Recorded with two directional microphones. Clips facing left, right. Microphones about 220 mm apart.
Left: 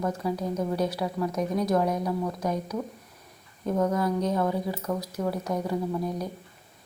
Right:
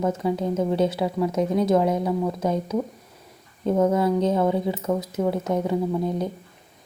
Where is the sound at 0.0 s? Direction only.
20° right (ahead or behind).